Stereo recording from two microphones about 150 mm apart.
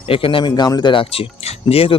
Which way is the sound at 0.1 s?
35° left (ahead or behind).